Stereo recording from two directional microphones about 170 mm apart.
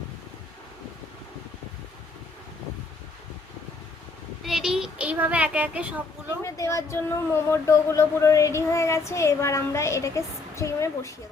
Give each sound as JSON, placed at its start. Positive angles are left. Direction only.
{"t": 4.4, "sound": "speech", "side_deg": 0}
{"t": 6.4, "sound": "speech", "side_deg": 15}